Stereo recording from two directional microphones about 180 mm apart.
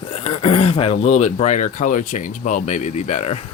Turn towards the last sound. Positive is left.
turn(degrees=40)  # may be behind; listen again after turning